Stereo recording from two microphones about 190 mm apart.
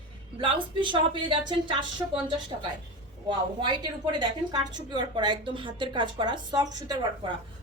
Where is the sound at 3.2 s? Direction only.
25° right (ahead or behind).